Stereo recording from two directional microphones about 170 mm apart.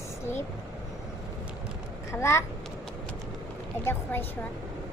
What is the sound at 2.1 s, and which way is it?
Speech, 15° left (ahead or behind).